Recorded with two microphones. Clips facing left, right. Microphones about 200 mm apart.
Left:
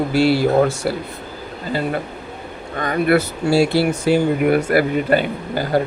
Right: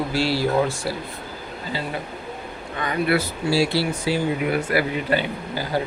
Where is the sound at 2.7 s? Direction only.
45° left (ahead or behind).